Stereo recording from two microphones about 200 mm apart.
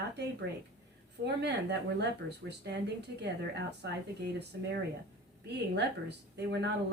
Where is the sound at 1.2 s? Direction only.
55° right (ahead or behind).